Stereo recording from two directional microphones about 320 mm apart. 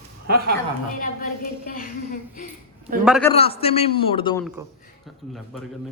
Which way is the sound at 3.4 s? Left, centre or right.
Centre.